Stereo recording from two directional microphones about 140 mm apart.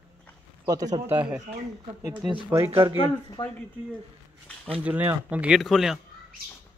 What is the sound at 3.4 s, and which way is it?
Speech, 40° left (ahead or behind).